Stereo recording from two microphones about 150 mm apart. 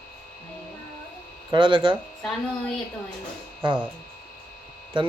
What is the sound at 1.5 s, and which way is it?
Speech, 35° right (ahead or behind).